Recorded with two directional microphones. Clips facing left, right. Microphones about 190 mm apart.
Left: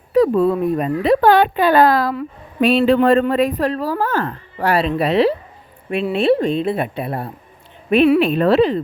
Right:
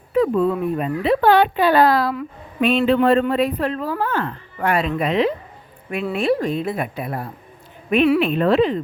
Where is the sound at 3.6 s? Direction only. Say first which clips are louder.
Left 3 dB; 40° left (ahead or behind).